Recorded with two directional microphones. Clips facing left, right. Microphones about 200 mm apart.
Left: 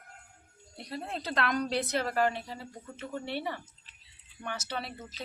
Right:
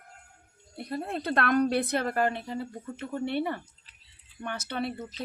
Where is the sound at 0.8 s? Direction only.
55° right (ahead or behind).